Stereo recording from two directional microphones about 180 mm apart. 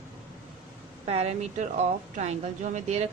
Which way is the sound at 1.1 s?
35° right (ahead or behind).